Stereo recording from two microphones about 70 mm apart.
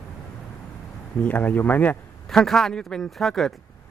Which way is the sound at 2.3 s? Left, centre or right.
Centre.